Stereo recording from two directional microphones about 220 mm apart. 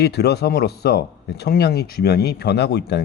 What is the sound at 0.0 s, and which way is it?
Speech, 50° left (ahead or behind).